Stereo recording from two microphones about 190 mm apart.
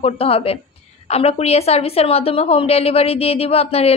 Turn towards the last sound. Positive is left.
turn(degrees=30)  # may be behind; listen again after turning